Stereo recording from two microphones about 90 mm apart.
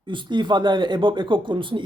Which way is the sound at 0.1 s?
65° right (ahead or behind).